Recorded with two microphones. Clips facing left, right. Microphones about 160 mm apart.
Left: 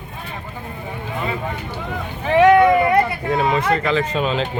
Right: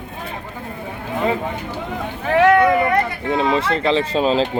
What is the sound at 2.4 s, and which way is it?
Vehicle, 15° left (ahead or behind).